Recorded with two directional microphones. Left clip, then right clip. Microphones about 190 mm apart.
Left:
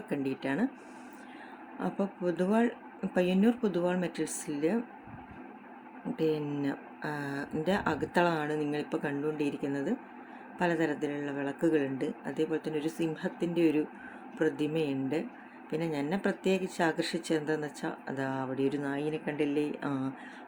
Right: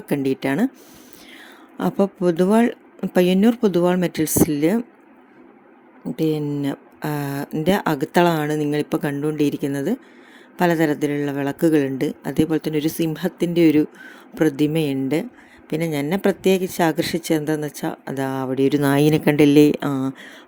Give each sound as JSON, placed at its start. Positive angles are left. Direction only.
{"t": 0.1, "sound": "speech", "side_deg": -50}
{"t": 1.8, "sound": "speech", "side_deg": -50}
{"t": 6.1, "sound": "speech", "side_deg": -45}
{"t": 18.9, "sound": "speech", "side_deg": -60}